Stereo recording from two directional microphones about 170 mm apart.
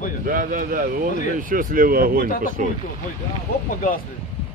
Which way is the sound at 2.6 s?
50° right (ahead or behind).